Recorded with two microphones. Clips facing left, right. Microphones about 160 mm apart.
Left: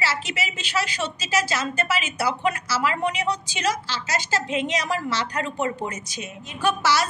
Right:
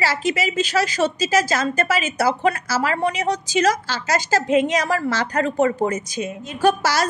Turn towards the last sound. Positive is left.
turn(degrees=-45)  # may be behind; listen again after turning